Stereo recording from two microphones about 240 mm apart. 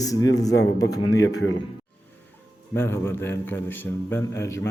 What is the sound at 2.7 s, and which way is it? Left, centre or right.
Speech, centre.